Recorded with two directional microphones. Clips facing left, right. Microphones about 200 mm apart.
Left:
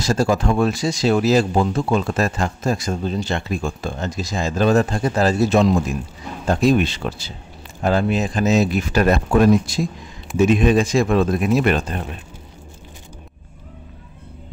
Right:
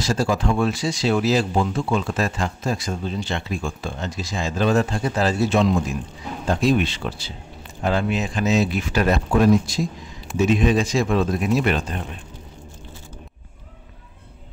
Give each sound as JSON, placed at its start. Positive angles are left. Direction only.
{"t": 0.0, "sound": "speech", "side_deg": 45}